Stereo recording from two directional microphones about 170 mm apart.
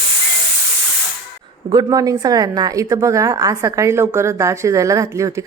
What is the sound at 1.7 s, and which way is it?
Speech, 20° right (ahead or behind).